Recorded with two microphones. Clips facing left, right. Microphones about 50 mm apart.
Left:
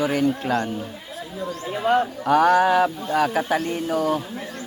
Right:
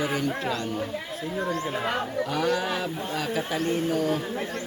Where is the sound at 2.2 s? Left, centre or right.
Left.